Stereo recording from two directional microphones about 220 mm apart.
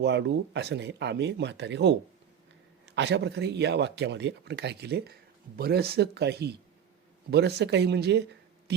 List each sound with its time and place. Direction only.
0.0 s speech: 50° right (ahead or behind)